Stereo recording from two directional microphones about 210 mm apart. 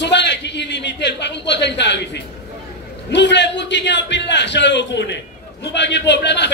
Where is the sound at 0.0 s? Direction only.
55° left (ahead or behind).